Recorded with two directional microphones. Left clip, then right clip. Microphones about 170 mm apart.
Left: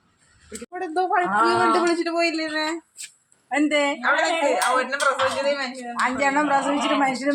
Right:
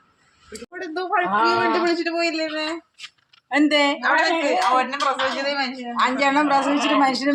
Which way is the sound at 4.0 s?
10° left (ahead or behind).